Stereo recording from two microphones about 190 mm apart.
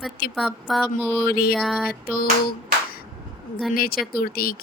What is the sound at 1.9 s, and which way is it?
Speech, 50° left (ahead or behind).